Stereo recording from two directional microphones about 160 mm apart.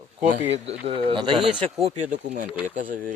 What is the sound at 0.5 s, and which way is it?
Speech, 35° right (ahead or behind).